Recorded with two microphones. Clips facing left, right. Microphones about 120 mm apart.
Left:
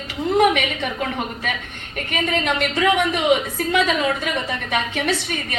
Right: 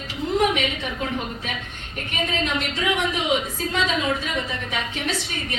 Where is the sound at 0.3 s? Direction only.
65° left (ahead or behind).